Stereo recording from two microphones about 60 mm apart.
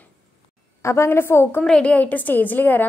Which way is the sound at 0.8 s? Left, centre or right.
Left.